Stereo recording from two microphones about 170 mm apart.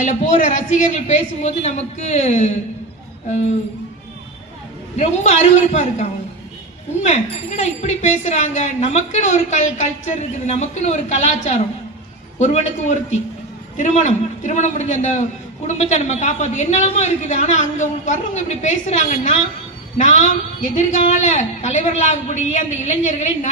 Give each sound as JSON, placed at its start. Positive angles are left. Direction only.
{"t": 0.0, "sound": "a man's voice", "side_deg": 45}
{"t": 4.9, "sound": "a woman's voice", "side_deg": 40}